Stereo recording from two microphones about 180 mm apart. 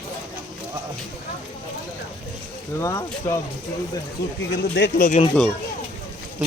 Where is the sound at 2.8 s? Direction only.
15° left (ahead or behind).